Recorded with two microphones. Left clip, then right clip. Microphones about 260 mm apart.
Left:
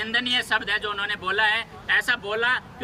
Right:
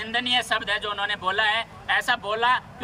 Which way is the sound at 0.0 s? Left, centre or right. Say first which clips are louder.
Even; centre.